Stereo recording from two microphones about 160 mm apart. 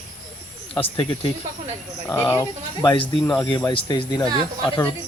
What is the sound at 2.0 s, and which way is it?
Speech, 20° left (ahead or behind).